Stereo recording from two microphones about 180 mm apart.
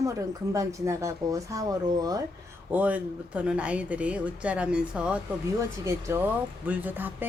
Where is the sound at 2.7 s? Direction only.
10° right (ahead or behind).